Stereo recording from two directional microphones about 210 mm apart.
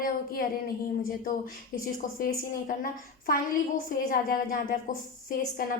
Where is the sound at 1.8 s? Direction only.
45° left (ahead or behind).